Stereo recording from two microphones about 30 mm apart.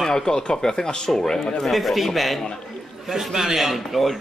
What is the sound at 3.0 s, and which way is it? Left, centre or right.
A man's voice, centre.